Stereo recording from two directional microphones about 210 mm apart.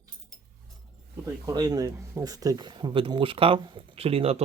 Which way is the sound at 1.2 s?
15° right (ahead or behind).